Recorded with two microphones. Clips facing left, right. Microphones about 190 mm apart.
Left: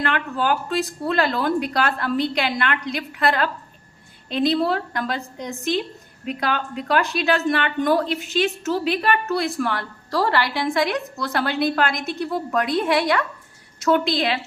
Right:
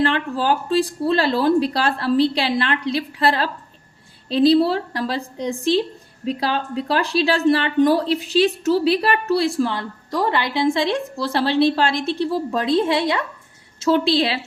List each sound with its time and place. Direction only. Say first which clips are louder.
0.0 s a woman's voice: right 3 dB; 30° right (ahead or behind)